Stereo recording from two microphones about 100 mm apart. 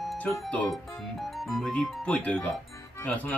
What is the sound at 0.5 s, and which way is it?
Speech, 10° left (ahead or behind).